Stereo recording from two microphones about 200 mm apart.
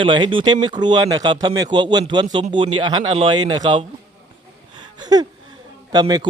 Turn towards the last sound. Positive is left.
turn(degrees=-20)  # may be behind; listen again after turning